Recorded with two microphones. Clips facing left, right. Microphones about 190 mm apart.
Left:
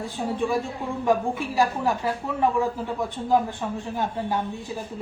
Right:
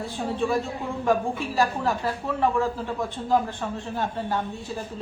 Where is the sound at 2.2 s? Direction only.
15° left (ahead or behind).